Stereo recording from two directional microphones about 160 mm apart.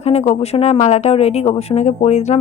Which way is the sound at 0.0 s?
40° left (ahead or behind).